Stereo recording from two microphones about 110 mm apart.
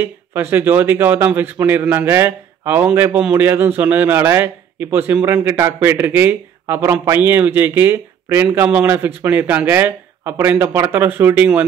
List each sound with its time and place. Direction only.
0.0 s a man's voice: 20° right (ahead or behind)